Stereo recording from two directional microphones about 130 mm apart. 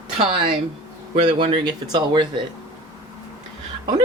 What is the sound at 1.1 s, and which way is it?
Speech, 40° right (ahead or behind).